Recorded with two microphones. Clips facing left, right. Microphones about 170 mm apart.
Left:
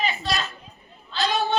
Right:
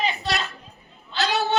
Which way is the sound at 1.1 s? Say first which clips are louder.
Even; 75° right (ahead or behind).